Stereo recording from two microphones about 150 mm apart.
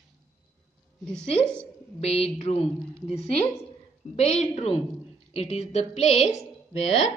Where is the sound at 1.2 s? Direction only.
45° left (ahead or behind).